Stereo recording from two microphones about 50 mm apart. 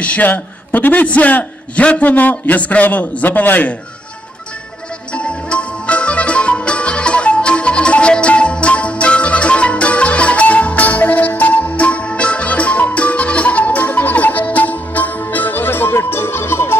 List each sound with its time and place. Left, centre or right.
0.0 s a man's voice: left
5.1 s music: left